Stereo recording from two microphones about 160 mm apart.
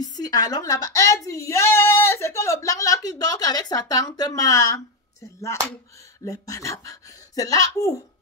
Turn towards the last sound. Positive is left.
turn(degrees=20)  # may be behind; listen again after turning